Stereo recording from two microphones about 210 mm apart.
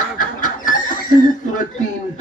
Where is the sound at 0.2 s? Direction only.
40° left (ahead or behind).